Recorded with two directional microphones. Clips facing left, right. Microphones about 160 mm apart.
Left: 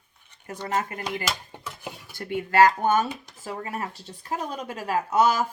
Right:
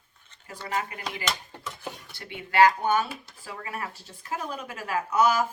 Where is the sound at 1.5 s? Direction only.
15° left (ahead or behind).